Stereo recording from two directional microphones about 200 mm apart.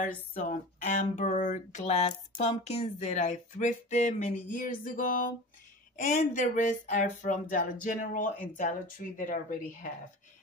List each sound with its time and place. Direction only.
0.3 s speech: 40° left (ahead or behind)